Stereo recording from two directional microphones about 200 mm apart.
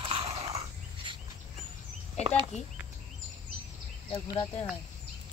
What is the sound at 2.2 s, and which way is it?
Speech, 25° right (ahead or behind).